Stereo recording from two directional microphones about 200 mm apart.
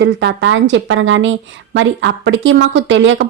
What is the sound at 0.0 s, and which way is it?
Speech, 60° right (ahead or behind).